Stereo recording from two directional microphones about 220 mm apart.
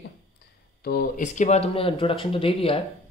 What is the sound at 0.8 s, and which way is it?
Speech, 40° left (ahead or behind).